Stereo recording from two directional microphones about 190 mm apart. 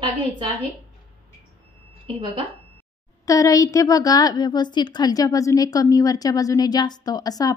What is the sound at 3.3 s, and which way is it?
A woman's voice, 15° left (ahead or behind).